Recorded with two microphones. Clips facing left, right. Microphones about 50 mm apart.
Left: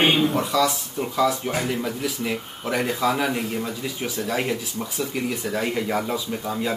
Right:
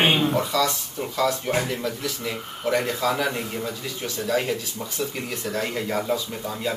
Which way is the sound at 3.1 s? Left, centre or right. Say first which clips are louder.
Left 1 dB; centre.